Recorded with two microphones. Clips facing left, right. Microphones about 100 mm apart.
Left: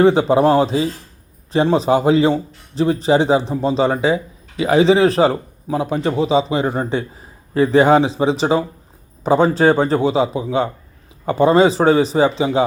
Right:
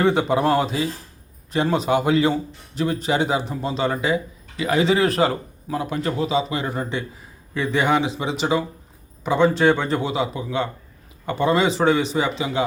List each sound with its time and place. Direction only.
0.0 s a man's voice: 30° left (ahead or behind)